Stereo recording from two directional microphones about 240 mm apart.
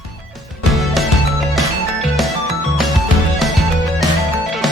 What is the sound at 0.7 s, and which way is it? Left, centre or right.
Music, centre.